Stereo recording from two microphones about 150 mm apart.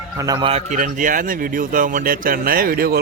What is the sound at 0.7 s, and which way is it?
Speech, 60° right (ahead or behind).